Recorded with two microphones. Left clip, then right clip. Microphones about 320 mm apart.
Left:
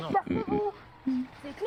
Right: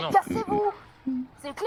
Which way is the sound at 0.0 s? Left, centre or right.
Right.